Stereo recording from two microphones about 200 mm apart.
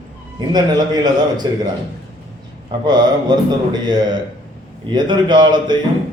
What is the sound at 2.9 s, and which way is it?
A man's voice, 20° right (ahead or behind).